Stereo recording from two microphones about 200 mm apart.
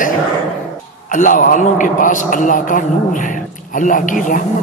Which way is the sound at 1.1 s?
40° left (ahead or behind).